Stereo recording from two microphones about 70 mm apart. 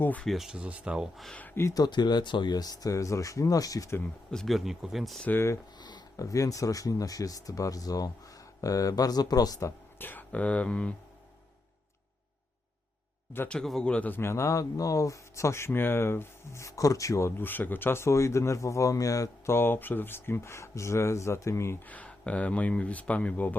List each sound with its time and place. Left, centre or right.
0.0 s speech: left
0.3 s speech: centre
0.6 s speech: centre
1.7 s speech: left
2.9 s speech: left
4.4 s speech: centre
6.1 s speech: left
10.0 s speech: left
13.5 s a man's voice: centre
14.1 s speech: left
17.4 s speech: left
19.5 s speech: left
21.8 s speech: left